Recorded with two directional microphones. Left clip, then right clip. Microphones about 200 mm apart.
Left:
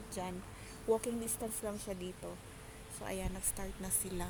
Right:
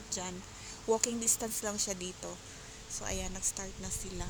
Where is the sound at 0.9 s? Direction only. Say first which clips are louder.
Right 4 dB; 10° right (ahead or behind).